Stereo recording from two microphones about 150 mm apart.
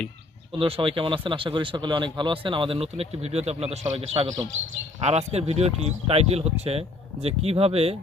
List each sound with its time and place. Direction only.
0.5 s speech: 35° right (ahead or behind)